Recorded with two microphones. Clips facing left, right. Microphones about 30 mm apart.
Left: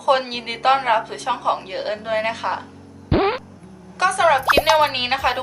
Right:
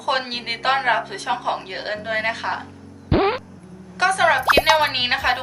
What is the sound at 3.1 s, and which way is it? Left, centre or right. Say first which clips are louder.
Music: even; centre.